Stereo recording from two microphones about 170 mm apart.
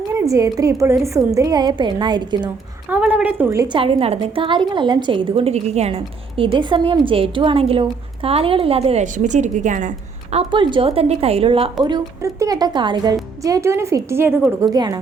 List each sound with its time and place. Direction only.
0.1 s a woman's voice: 20° right (ahead or behind)
2.9 s a woman's voice: 5° right (ahead or behind)
3.8 s a woman's voice: 35° right (ahead or behind)
10.3 s a woman's voice: 30° right (ahead or behind); by 14.6 s 10° right (ahead or behind)
14.6 s a woman's voice: 20° right (ahead or behind)